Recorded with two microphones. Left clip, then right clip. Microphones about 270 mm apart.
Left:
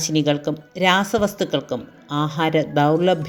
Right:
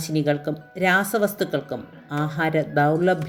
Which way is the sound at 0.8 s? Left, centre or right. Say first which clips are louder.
Left 2 dB; centre.